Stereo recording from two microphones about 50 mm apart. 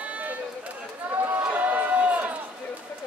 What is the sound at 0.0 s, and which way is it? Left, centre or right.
Run, right.